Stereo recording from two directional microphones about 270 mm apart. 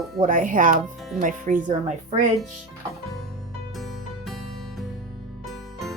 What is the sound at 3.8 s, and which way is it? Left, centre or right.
Music, centre.